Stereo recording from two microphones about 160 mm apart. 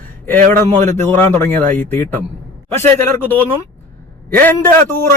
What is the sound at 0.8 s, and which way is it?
Music, 15° left (ahead or behind).